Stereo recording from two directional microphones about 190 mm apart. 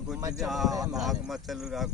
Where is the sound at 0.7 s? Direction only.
20° right (ahead or behind).